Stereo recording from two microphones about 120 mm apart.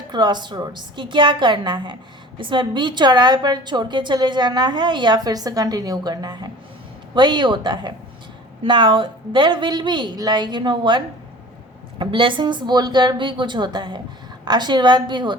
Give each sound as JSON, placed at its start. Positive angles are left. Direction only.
{"t": 0.1, "sound": "a woman's voice", "side_deg": -35}